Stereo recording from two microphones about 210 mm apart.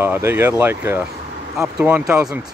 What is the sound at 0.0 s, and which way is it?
Speech, 10° right (ahead or behind).